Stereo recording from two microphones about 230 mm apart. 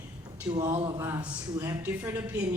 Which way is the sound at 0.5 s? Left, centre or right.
Right.